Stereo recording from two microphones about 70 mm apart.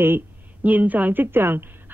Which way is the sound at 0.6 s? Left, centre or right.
Right.